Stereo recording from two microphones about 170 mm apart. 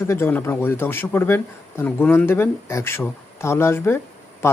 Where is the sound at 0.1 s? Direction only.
10° left (ahead or behind).